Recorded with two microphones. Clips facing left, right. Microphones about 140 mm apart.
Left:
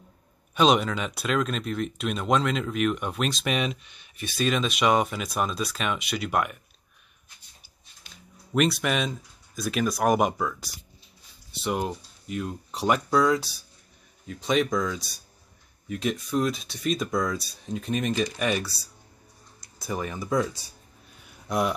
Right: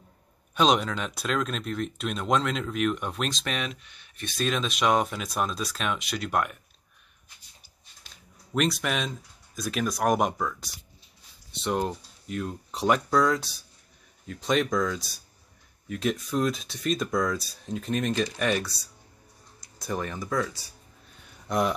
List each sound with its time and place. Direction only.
0.6 s speech: centre (ahead or behind)
3.4 s speech: 15° left (ahead or behind)
4.2 s speech: 5° left (ahead or behind)
8.5 s speech: centre (ahead or behind)
20.2 s speech: 20° left (ahead or behind)
21.2 s a sound: 5° left (ahead or behind)